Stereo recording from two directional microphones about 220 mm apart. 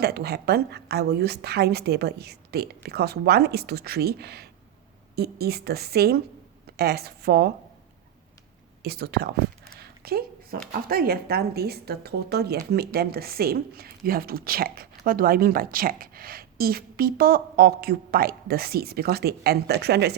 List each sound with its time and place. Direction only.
0.0 s a woman's voice: 45° right (ahead or behind)
8.8 s a woman's voice: 45° right (ahead or behind)
9.7 s a sound: 45° right (ahead or behind)
10.7 s a woman's voice: 45° right (ahead or behind)